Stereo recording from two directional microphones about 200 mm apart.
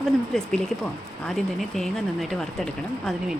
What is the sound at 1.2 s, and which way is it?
Speech, centre (ahead or behind).